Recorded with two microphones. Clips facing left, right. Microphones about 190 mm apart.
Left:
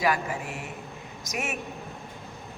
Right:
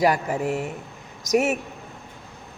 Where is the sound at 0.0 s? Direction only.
40° right (ahead or behind).